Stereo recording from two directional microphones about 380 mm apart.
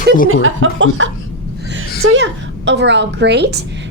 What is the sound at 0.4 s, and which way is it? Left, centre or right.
A woman's voice, right.